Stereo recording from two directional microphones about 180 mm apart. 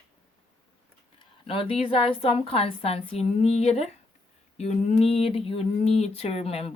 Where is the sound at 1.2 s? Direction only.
30° left (ahead or behind).